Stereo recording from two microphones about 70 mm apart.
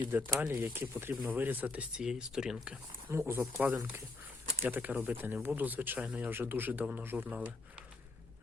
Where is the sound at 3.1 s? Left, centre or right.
Right.